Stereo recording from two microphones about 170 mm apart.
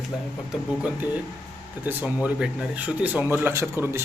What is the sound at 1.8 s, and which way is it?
Speech, 10° right (ahead or behind).